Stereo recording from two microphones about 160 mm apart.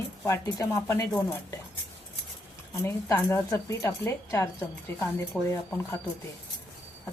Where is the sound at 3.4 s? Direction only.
20° left (ahead or behind).